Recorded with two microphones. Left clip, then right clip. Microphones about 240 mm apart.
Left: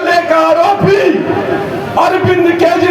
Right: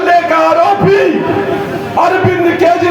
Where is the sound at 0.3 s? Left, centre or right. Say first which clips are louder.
Even; left.